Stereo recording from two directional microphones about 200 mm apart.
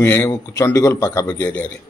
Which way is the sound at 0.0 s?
10° left (ahead or behind).